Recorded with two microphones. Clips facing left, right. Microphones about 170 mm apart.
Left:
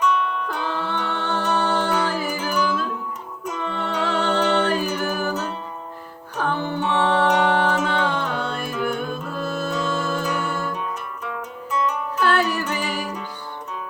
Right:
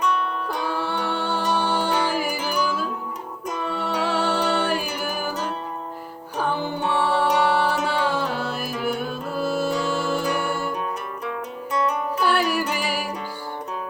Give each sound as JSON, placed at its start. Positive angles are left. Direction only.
{"t": 0.0, "sound": "music", "side_deg": -35}
{"t": 0.4, "sound": "music", "side_deg": -10}
{"t": 6.3, "sound": "music", "side_deg": -10}
{"t": 11.7, "sound": "music", "side_deg": -35}
{"t": 12.2, "sound": "music", "side_deg": -10}